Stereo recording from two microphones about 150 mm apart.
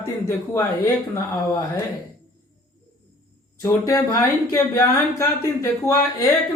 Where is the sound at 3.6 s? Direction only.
25° left (ahead or behind).